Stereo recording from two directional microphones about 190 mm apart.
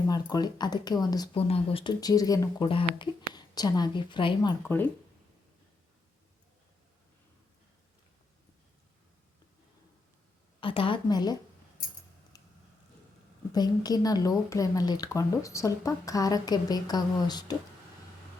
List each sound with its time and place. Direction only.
0.1 s speech: 20° left (ahead or behind)
10.6 s speech: 25° left (ahead or behind)
12.3 s a sound: 20° left (ahead or behind)
13.5 s speech: 20° left (ahead or behind)